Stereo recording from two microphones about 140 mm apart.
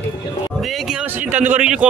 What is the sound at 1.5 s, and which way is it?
Speech, 10° right (ahead or behind).